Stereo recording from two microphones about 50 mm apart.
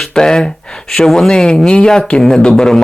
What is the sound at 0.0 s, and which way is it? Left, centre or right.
Speech, centre.